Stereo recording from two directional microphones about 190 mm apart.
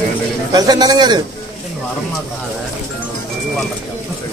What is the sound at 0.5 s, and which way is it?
Speech, 20° right (ahead or behind).